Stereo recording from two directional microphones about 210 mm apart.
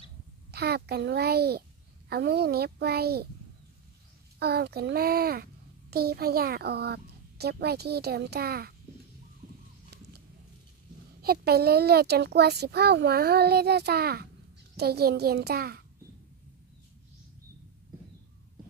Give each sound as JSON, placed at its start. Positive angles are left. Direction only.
{"t": 0.5, "sound": "a child's voice", "side_deg": -50}
{"t": 4.4, "sound": "a child's voice", "side_deg": -50}
{"t": 11.2, "sound": "a child's voice", "side_deg": -50}